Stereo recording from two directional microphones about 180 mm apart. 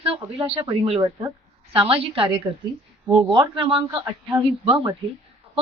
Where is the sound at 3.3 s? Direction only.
25° right (ahead or behind).